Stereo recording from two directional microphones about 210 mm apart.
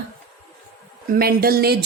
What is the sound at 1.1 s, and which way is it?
Speech, 45° right (ahead or behind).